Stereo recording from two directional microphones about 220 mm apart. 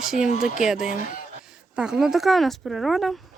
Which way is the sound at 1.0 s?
35° left (ahead or behind).